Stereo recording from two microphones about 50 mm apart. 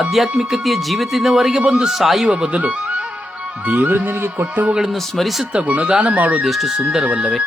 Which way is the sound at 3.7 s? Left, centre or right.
Right.